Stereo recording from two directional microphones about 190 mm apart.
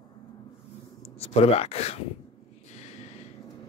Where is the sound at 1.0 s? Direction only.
30° left (ahead or behind).